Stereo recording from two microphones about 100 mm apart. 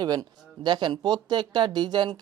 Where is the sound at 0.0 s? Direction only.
40° right (ahead or behind).